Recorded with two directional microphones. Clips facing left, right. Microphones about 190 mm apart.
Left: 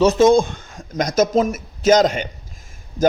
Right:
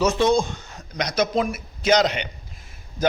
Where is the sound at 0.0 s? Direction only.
40° left (ahead or behind).